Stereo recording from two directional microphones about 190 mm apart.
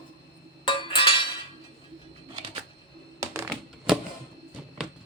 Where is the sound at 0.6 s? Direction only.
25° left (ahead or behind).